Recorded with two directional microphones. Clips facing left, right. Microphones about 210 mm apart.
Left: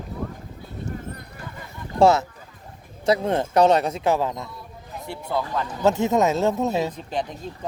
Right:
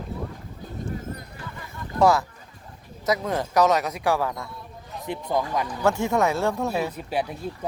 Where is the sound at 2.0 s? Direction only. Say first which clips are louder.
Left 3 dB; 25° left (ahead or behind).